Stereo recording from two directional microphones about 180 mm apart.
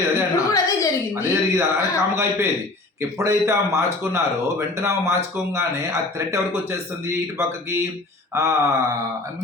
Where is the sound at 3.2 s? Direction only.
15° right (ahead or behind).